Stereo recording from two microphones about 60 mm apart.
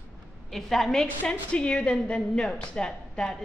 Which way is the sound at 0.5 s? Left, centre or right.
Centre.